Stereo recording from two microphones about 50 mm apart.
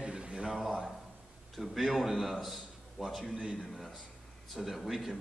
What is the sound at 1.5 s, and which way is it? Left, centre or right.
A man's voice, centre.